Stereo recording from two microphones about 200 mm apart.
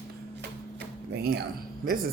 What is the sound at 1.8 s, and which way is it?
Speech, 45° right (ahead or behind).